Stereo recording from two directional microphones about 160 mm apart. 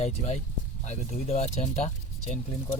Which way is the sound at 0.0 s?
45° left (ahead or behind).